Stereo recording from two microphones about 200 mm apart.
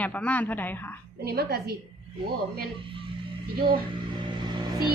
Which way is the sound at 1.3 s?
50° right (ahead or behind).